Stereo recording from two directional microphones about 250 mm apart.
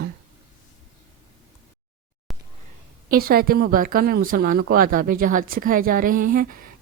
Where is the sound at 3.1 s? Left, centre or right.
Right.